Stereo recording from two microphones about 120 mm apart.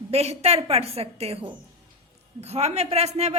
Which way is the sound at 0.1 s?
60° right (ahead or behind).